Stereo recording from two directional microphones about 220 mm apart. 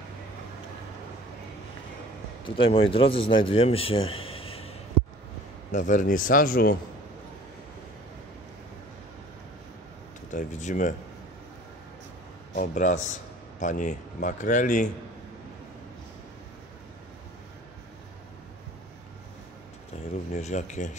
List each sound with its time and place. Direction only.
2.4 s a man's voice: 25° left (ahead or behind); by 6.8 s 40° left (ahead or behind)
10.3 s speech: 35° left (ahead or behind)
12.5 s speech: 35° left (ahead or behind)
20.3 s speech: 35° left (ahead or behind)